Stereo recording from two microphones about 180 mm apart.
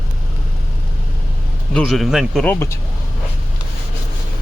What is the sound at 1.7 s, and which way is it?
Speech, 5° left (ahead or behind).